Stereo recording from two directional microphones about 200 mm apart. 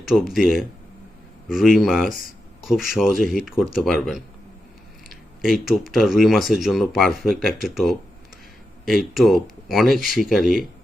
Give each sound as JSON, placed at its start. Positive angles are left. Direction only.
{"t": 0.0, "sound": "speech", "side_deg": 0}
{"t": 2.0, "sound": "speech", "side_deg": 45}
{"t": 2.6, "sound": "speech", "side_deg": 0}
{"t": 5.4, "sound": "speech", "side_deg": 0}
{"t": 9.1, "sound": "speech", "side_deg": 0}